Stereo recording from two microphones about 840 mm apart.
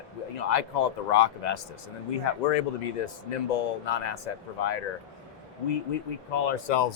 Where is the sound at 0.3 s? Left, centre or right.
Left.